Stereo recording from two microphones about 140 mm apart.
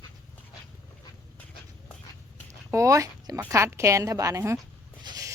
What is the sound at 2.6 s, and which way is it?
Speech, 20° right (ahead or behind).